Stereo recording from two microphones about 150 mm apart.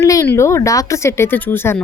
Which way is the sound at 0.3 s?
20° left (ahead or behind).